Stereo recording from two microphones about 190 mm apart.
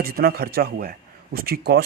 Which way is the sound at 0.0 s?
55° right (ahead or behind).